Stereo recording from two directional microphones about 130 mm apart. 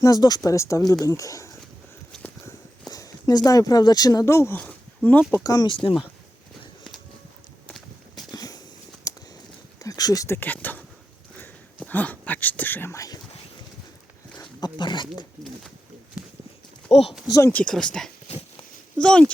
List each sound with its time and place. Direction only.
0.0 s speech: 30° left (ahead or behind)
2.1 s walk: centre (ahead or behind)
2.9 s speech: 30° left (ahead or behind); by 5.2 s 10° left (ahead or behind)
5.3 s speech: 25° left (ahead or behind)
5.6 s speech: 40° left (ahead or behind)
8.1 s a sound: 30° left (ahead or behind)
9.7 s speech: 30° left (ahead or behind)
14.6 s speech: 35° left (ahead or behind)
16.9 s speech: 55° left (ahead or behind)
17.2 s speech: 25° left (ahead or behind)
17.5 s speech: 10° left (ahead or behind)